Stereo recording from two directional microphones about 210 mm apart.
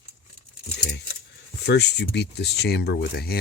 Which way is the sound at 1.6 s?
55° left (ahead or behind).